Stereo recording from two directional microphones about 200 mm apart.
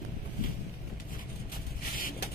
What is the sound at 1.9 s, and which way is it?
Vehicle, 45° left (ahead or behind).